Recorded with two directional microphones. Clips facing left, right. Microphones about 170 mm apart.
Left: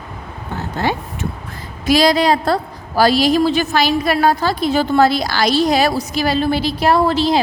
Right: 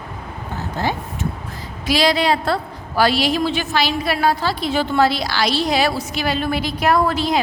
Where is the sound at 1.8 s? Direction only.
45° left (ahead or behind).